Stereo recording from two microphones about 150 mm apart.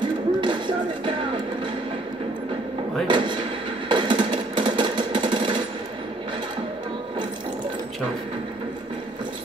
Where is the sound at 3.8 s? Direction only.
30° right (ahead or behind).